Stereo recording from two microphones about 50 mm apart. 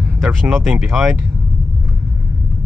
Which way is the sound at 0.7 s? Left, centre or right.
Centre.